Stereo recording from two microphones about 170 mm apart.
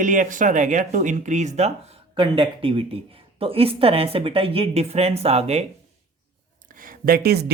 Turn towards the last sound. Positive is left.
turn(degrees=-70)  # may be behind; listen again after turning